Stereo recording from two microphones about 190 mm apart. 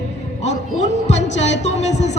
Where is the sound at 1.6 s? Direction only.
35° left (ahead or behind).